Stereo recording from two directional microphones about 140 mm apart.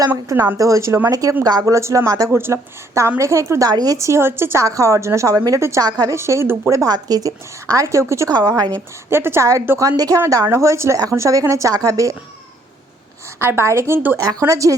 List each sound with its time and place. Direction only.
0.1 s a woman's voice: 15° right (ahead or behind)
9.0 s a woman's voice: 15° right (ahead or behind)
13.4 s a woman's voice: 15° right (ahead or behind)